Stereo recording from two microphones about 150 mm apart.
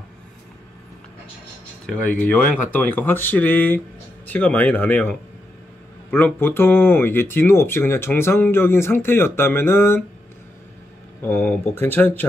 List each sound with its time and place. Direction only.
2.0 s speech: 10° left (ahead or behind)
11.2 s speech: 15° left (ahead or behind)